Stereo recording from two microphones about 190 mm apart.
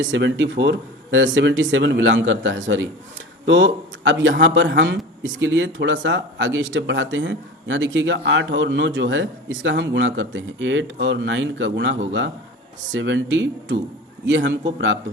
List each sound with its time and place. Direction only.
0.0 s speech: 75° right (ahead or behind)